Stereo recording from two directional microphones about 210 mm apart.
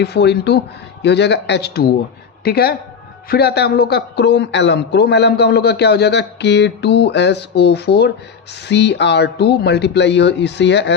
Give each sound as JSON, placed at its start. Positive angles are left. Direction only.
{"t": 0.0, "sound": "a man's voice", "side_deg": 55}